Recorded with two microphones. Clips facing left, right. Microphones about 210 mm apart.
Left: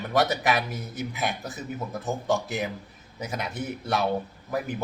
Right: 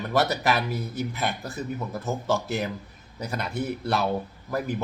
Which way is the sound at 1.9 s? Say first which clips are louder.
Left 1 dB; centre (ahead or behind).